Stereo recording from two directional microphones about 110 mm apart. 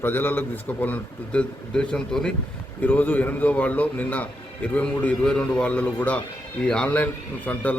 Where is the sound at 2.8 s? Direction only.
15° left (ahead or behind).